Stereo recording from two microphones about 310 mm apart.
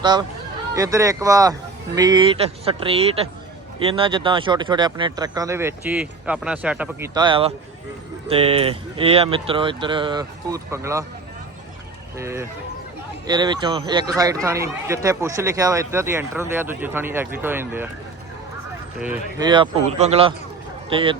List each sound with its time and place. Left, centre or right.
0.0 s speech: centre
12.1 s speech: centre
18.9 s speech: centre